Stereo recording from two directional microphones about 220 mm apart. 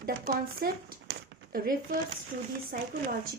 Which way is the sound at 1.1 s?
45° right (ahead or behind).